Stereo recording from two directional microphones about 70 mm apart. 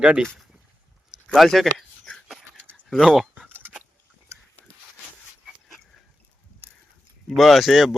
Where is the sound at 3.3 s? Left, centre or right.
Right.